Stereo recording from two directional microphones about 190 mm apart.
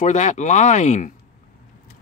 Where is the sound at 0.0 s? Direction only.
40° left (ahead or behind).